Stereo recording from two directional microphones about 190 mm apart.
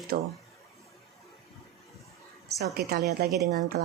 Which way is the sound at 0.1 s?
45° right (ahead or behind).